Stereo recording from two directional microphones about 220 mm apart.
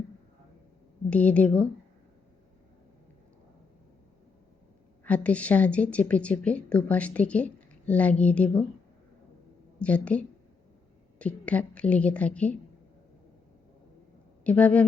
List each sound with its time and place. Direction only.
1.1 s a woman's voice: 5° left (ahead or behind)
5.0 s speech: 5° left (ahead or behind)
9.7 s a woman's voice: 5° left (ahead or behind)
14.4 s a woman's voice: 5° left (ahead or behind)